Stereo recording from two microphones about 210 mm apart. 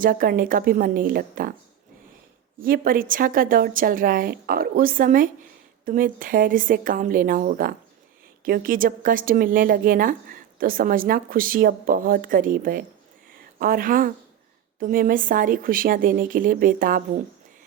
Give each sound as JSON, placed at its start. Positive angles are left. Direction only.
{"t": 0.0, "sound": "a woman's voice", "side_deg": -40}
{"t": 2.6, "sound": "a woman's voice", "side_deg": -45}